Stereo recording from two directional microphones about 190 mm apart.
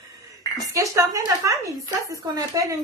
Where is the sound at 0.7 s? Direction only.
15° right (ahead or behind).